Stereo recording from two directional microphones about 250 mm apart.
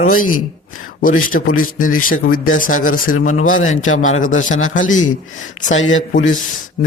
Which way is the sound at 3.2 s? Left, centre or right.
Left.